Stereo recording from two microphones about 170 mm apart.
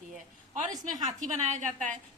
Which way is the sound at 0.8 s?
45° right (ahead or behind).